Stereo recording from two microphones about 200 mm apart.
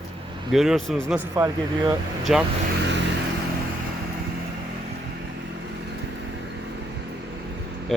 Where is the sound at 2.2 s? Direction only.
Centre (ahead or behind).